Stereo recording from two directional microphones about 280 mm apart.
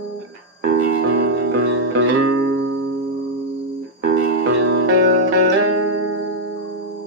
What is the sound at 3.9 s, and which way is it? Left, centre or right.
Music, right.